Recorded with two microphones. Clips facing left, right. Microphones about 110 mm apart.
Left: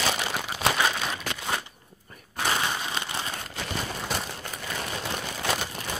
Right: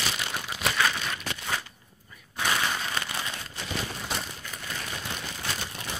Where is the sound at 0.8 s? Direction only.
25° left (ahead or behind).